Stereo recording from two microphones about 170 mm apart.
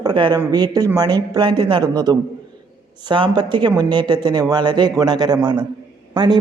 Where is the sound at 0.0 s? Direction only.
25° right (ahead or behind).